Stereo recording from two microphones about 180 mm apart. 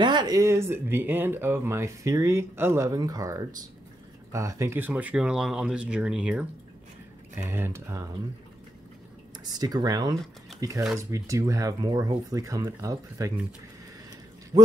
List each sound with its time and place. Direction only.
0.0 s speech: 25° right (ahead or behind); by 6.4 s 5° right (ahead or behind)
7.4 s speech: 10° right (ahead or behind)
9.4 s speech: 20° right (ahead or behind)
14.5 s a man's voice: 25° right (ahead or behind)